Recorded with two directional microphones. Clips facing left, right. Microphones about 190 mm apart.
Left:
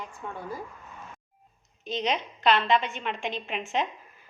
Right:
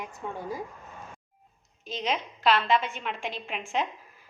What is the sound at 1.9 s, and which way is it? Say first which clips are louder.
A woman's voice: left 2 dB; centre (ahead or behind).